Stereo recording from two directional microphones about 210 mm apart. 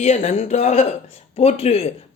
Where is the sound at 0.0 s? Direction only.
30° left (ahead or behind).